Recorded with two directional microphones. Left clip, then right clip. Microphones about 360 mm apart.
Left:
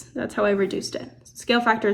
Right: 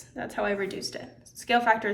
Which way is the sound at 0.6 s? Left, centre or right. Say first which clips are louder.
Left 7 dB; left.